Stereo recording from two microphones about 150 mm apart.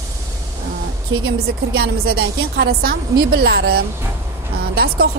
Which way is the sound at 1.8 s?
90° right.